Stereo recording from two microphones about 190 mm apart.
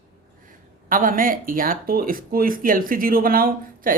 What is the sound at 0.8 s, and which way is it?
Speech, 45° right (ahead or behind).